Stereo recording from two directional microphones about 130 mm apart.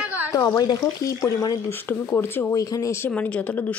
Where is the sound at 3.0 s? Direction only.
10° left (ahead or behind).